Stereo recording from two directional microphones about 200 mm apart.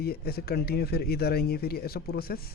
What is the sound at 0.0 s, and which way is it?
Speech, 50° left (ahead or behind).